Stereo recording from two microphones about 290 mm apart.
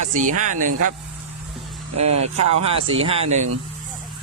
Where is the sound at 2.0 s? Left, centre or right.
Right.